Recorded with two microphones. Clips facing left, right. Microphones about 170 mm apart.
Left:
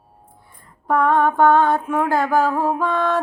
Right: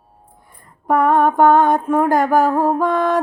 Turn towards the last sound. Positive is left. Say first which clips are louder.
# right 3 dB
turn(degrees=-15)  # may be behind; listen again after turning